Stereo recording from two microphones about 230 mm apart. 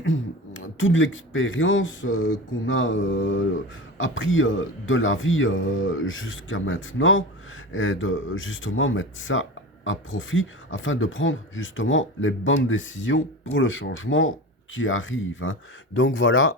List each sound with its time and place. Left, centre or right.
0.0 s speech: left